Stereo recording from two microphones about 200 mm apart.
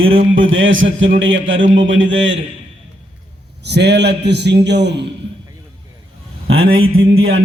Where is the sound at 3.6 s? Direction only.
55° right (ahead or behind).